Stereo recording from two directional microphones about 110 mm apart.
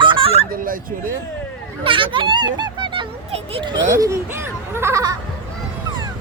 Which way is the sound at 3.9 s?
30° right (ahead or behind).